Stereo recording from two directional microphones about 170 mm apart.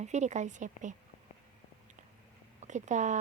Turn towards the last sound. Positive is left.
turn(degrees=-45)  # may be behind; listen again after turning